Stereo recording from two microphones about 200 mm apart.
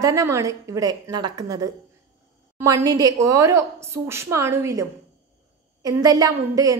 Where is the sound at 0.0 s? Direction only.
15° right (ahead or behind).